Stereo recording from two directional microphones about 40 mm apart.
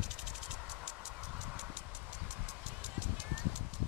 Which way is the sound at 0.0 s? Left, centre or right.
Centre.